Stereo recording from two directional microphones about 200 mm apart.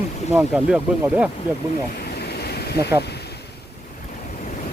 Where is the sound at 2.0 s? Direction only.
55° left (ahead or behind).